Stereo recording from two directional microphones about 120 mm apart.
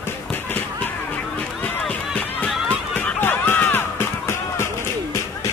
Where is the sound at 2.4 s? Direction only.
10° left (ahead or behind).